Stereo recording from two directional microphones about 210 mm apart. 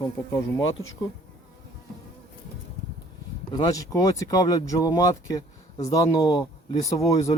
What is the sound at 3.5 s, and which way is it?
Speech, 15° left (ahead or behind).